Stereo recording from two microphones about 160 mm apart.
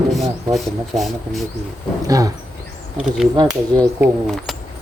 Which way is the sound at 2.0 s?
20° right (ahead or behind).